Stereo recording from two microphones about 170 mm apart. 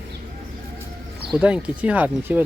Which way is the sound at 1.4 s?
5° right (ahead or behind).